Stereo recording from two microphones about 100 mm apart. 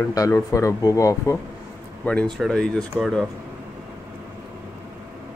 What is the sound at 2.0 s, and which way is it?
Speech, 15° left (ahead or behind).